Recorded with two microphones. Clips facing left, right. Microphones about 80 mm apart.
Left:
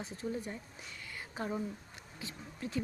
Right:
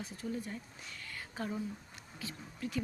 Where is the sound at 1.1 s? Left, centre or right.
Left.